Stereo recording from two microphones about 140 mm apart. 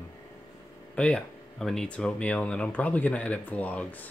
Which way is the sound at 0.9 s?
5° left (ahead or behind).